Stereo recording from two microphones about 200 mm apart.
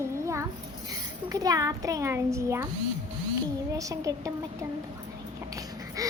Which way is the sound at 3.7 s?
15° right (ahead or behind).